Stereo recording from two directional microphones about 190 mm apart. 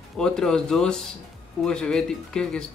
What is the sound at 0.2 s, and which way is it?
Speech, 5° left (ahead or behind).